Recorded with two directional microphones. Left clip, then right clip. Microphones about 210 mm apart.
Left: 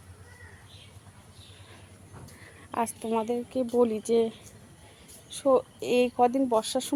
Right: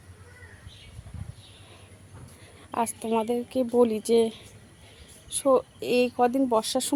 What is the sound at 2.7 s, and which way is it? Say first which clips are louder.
Speech: right 2 dB; 10° right (ahead or behind).